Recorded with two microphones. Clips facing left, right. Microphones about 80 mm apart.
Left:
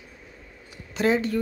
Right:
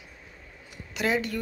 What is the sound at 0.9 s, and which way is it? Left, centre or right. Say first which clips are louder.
Speech: left 5 dB; left.